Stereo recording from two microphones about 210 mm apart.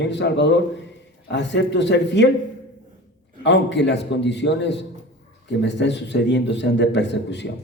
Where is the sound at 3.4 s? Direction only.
55° left (ahead or behind).